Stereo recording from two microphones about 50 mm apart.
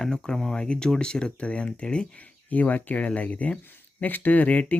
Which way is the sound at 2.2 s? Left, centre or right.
Left.